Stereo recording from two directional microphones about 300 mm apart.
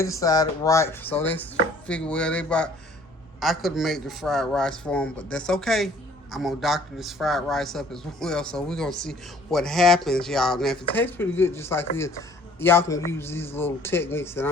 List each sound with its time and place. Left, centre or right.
0.0 s a man's voice: centre